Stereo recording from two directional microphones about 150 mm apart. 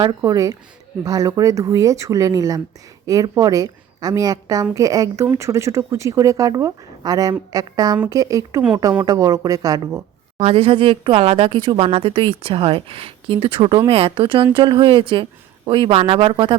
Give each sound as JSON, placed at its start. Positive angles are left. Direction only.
{"t": 0.0, "sound": "speech", "side_deg": -25}
{"t": 10.3, "sound": "speech", "side_deg": -40}